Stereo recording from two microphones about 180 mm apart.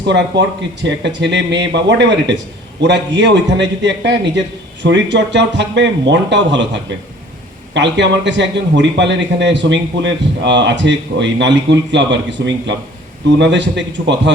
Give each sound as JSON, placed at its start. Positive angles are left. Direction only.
{"t": 0.0, "sound": "a man's voice", "side_deg": -75}
{"t": 7.7, "sound": "a man's voice", "side_deg": -80}